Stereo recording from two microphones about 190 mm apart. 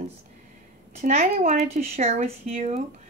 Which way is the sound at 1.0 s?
35° right (ahead or behind).